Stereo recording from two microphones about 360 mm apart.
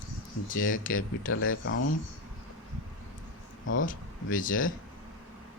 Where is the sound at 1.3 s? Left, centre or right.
Left.